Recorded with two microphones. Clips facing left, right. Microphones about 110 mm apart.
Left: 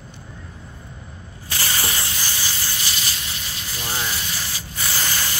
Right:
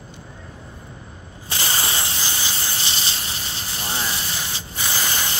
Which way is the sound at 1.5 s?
25° right (ahead or behind).